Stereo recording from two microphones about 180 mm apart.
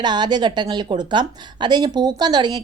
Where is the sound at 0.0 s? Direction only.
25° right (ahead or behind).